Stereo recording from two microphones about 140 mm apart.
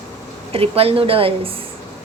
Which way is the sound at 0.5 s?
45° right (ahead or behind).